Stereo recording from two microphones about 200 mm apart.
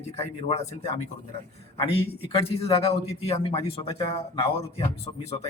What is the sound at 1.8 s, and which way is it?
A man's voice, 30° left (ahead or behind).